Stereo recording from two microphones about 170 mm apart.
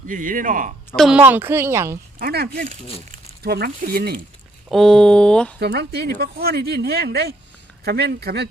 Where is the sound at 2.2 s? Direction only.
65° right (ahead or behind).